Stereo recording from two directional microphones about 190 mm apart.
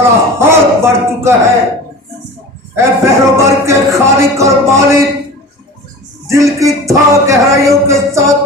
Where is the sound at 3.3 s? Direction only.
15° right (ahead or behind).